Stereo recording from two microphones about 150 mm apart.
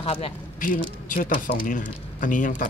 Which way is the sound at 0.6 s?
65° left (ahead or behind).